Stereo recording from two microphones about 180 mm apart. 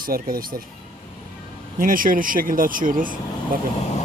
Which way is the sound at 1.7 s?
50° right (ahead or behind).